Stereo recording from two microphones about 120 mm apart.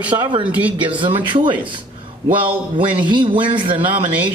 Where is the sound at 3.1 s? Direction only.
40° right (ahead or behind).